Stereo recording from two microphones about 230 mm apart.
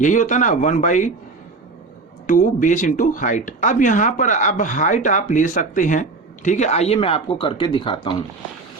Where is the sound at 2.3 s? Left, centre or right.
Left.